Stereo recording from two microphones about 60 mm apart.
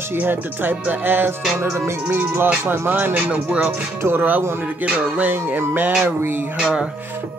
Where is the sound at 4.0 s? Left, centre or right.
Right.